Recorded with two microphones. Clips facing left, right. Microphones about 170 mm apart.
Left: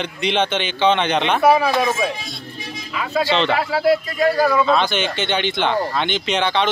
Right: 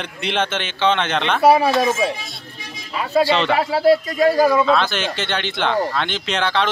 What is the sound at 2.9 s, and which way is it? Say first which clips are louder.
Speech: right 4 dB; 35° right (ahead or behind).